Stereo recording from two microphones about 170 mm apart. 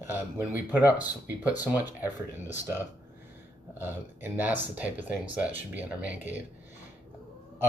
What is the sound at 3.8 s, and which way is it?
Speech, 10° right (ahead or behind).